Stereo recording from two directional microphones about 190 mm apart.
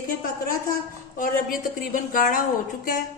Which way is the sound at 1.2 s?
45° left (ahead or behind).